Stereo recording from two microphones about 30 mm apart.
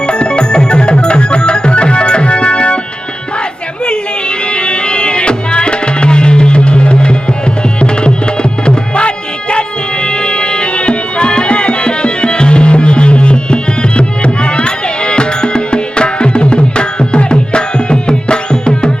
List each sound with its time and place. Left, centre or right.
0.1 s music: left
4.5 s music: left